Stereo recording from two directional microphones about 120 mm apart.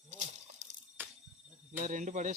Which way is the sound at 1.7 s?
90° right.